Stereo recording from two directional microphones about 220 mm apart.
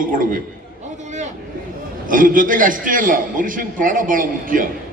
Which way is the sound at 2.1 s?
40° right (ahead or behind).